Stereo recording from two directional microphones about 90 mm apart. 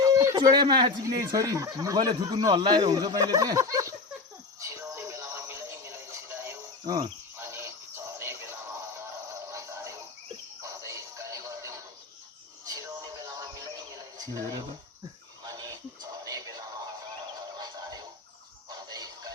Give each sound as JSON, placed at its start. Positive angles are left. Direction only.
{"t": 0.0, "sound": "a sound", "side_deg": -35}
{"t": 0.5, "sound": "speech", "side_deg": -55}
{"t": 1.0, "sound": "speech", "side_deg": -35}
{"t": 4.6, "sound": "music", "side_deg": -30}
{"t": 6.8, "sound": "cricket", "side_deg": -45}
{"t": 7.3, "sound": "a sound", "side_deg": -30}
{"t": 10.6, "sound": "music", "side_deg": -35}
{"t": 15.4, "sound": "synthetic singing", "side_deg": -40}
{"t": 17.6, "sound": "music", "side_deg": -45}